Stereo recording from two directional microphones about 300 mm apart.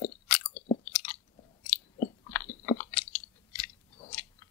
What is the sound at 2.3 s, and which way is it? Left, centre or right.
Chewing, centre.